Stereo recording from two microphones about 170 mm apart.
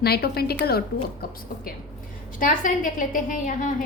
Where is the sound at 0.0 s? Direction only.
70° left (ahead or behind).